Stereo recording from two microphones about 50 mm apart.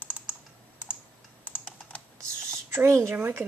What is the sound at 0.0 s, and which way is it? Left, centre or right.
Computer keyboard, right.